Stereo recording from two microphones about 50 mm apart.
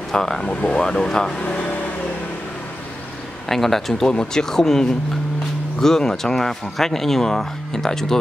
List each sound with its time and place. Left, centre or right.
0.1 s speech: centre
0.5 s speech: left
1.4 s speech: left
3.4 s speech: centre
4.1 s speech: centre